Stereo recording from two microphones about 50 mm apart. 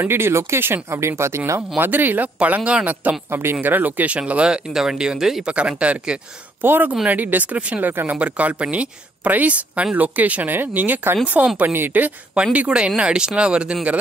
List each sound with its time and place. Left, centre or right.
0.0 s speech: right
1.8 s speech: right
3.3 s speech: right
3.6 s speech: right; by 5.5 s centre
5.5 s speech: right
6.6 s speech: right
7.9 s speech: right
8.2 s speech: right
11.7 s speech: right
12.5 s speech: right